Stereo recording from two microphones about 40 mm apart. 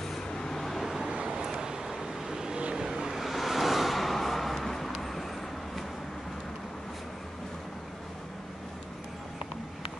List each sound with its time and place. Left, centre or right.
0.4 s vehicle: centre
0.7 s vehicle: centre
1.0 s vehicle: right; by 5.2 s centre